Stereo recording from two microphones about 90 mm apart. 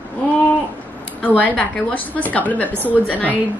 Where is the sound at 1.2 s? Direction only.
15° left (ahead or behind).